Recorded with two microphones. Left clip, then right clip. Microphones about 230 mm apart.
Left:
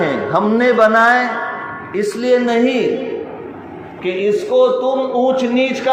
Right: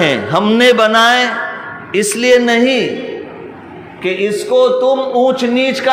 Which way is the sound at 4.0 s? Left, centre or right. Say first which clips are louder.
Right 1 dB; right.